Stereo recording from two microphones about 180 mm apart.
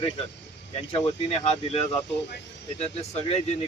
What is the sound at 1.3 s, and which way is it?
Speech, 35° left (ahead or behind).